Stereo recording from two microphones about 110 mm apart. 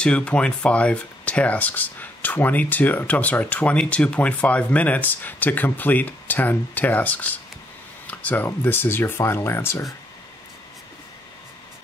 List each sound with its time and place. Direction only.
0.0 s speech: 10° left (ahead or behind)